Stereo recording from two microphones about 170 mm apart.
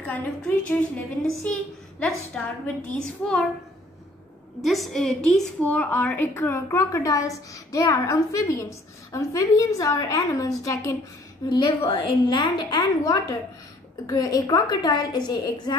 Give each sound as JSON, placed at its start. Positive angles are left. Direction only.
{"t": 0.7, "sound": "a woman's voice", "side_deg": 10}
{"t": 4.6, "sound": "a woman's voice", "side_deg": 0}